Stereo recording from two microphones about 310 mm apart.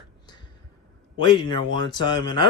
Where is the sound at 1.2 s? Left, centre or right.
Centre.